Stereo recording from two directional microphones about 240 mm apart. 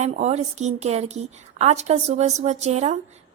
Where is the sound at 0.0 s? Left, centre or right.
Right.